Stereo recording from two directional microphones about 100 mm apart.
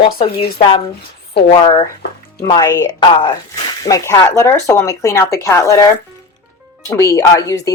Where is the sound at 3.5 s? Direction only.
35° left (ahead or behind).